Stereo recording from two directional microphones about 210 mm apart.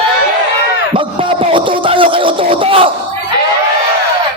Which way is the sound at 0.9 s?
25° right (ahead or behind).